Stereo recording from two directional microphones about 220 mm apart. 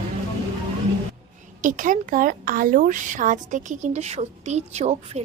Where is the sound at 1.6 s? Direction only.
35° right (ahead or behind).